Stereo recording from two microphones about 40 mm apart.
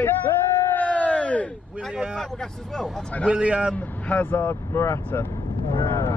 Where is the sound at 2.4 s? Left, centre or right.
Centre.